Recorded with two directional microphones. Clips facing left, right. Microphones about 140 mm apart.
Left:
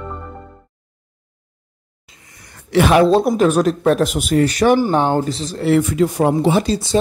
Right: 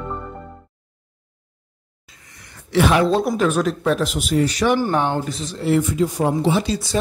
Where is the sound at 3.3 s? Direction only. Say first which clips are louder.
Left 5 dB; 40° left (ahead or behind).